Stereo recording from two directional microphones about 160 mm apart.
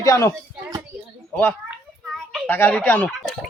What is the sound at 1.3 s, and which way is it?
A child's voice, 15° left (ahead or behind).